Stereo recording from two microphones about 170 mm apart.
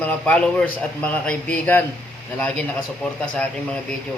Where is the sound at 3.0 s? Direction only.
5° left (ahead or behind).